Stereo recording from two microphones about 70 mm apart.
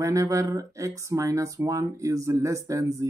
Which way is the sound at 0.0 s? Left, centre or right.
Right.